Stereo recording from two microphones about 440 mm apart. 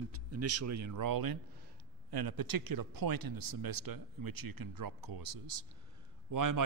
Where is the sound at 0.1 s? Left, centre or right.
Right.